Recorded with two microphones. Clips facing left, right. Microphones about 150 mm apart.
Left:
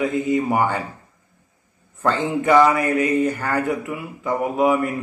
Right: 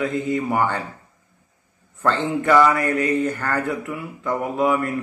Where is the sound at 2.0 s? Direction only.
15° left (ahead or behind).